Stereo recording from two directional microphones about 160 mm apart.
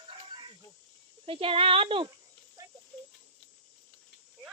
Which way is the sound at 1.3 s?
35° right (ahead or behind).